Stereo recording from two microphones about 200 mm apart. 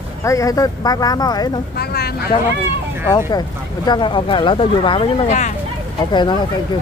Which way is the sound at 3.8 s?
25° left (ahead or behind).